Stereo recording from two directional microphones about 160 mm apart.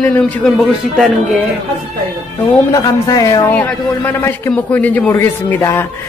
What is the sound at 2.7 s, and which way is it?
A man's voice, 20° left (ahead or behind).